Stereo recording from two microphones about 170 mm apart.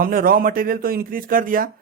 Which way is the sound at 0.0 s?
60° right (ahead or behind).